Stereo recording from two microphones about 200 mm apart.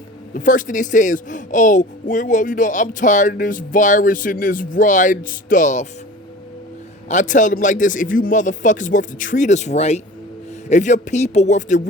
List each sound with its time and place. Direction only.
0.3 s speech: 40° left (ahead or behind)
7.1 s speech: 40° left (ahead or behind)